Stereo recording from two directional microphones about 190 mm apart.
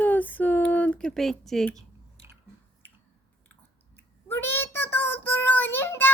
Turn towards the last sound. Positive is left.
turn(degrees=10)  # may be behind; listen again after turning